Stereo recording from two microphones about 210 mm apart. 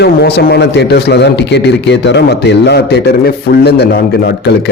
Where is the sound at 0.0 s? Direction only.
50° left (ahead or behind).